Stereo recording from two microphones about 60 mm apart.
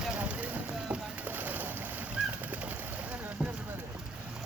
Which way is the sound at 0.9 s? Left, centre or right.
Right.